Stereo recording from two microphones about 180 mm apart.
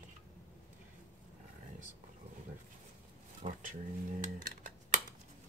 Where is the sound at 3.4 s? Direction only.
35° right (ahead or behind).